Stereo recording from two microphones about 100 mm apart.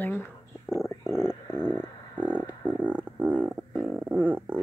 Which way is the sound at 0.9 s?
25° left (ahead or behind).